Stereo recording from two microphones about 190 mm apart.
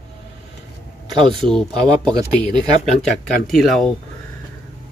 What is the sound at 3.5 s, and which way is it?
Speech, centre (ahead or behind).